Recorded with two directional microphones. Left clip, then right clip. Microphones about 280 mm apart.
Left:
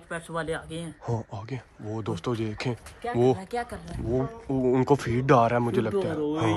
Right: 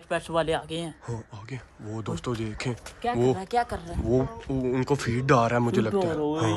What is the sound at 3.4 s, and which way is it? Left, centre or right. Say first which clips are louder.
Speech: right 6 dB; right.